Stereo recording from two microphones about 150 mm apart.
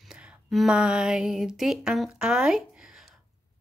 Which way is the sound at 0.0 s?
5° right (ahead or behind).